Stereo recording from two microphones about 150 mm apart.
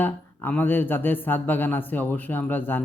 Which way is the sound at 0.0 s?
10° left (ahead or behind).